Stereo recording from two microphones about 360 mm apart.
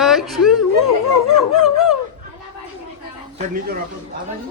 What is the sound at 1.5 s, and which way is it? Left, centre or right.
Dog, centre.